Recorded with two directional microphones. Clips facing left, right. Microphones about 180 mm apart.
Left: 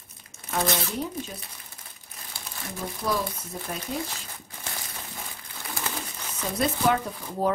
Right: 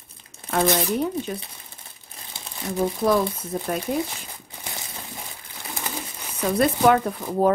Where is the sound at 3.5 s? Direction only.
50° right (ahead or behind).